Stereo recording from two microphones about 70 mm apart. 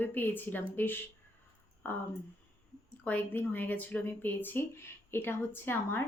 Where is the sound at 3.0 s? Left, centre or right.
Left.